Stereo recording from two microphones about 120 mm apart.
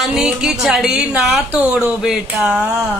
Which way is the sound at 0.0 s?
5° right (ahead or behind).